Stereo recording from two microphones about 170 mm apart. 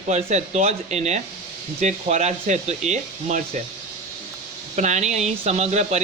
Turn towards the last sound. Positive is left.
turn(degrees=-40)  # may be behind; listen again after turning